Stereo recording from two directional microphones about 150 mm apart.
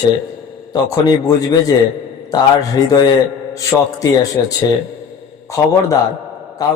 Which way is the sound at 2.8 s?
25° left (ahead or behind).